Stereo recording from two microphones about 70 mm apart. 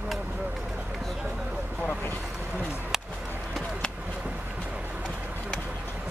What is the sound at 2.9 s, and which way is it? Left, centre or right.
Skateboard, centre.